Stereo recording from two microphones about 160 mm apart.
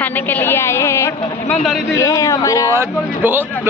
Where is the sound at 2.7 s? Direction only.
15° right (ahead or behind).